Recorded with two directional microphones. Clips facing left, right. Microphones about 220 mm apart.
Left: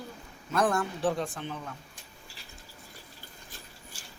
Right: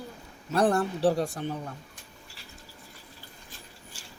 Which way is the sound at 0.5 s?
35° right (ahead or behind).